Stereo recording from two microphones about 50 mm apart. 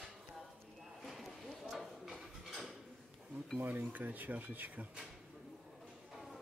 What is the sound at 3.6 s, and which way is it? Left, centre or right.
Speech, right.